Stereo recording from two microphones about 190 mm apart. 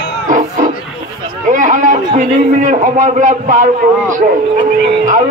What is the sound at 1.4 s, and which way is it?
A man's voice, 40° right (ahead or behind).